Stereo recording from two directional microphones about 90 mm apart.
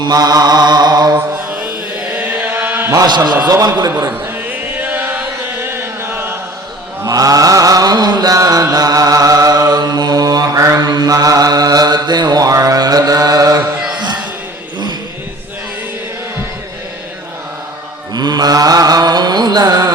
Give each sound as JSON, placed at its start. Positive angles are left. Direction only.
{"t": 0.0, "sound": "mantra", "side_deg": -50}
{"t": 1.1, "sound": "mantra", "side_deg": -20}
{"t": 2.1, "sound": "chant", "side_deg": -20}
{"t": 3.5, "sound": "mantra", "side_deg": -50}
{"t": 4.8, "sound": "chant", "side_deg": -20}
{"t": 7.0, "sound": "chant", "side_deg": -40}
{"t": 10.8, "sound": "mantra", "side_deg": -50}
{"t": 13.6, "sound": "music", "side_deg": -15}
{"t": 18.1, "sound": "mantra", "side_deg": -50}